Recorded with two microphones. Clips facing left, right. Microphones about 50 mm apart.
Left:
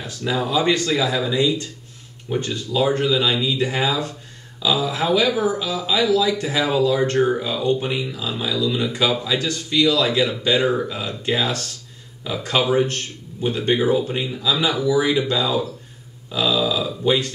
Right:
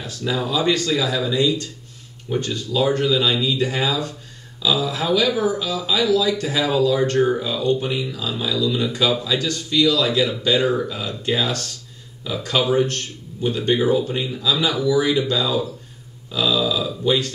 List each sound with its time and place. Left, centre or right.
0.0 s speech: centre
12.3 s speech: centre